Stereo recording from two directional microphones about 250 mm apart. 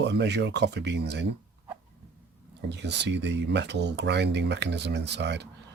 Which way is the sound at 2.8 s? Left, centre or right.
Right.